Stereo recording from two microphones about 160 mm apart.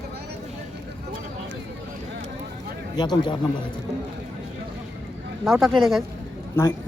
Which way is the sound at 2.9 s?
25° left (ahead or behind).